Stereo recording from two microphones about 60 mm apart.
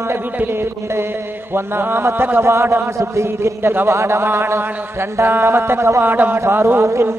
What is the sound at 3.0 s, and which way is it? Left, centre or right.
Mantra, right.